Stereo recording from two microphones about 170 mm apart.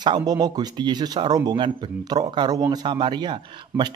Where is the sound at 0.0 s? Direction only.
25° right (ahead or behind).